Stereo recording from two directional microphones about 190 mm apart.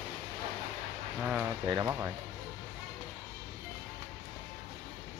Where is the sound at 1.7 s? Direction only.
20° right (ahead or behind).